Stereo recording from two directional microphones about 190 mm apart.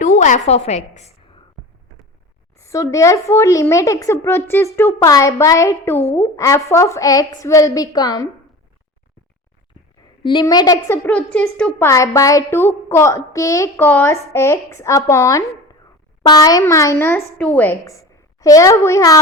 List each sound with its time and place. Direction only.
0.0 s a woman's voice: 40° left (ahead or behind)
2.6 s speech: 15° left (ahead or behind)
10.2 s a woman's voice: 20° left (ahead or behind)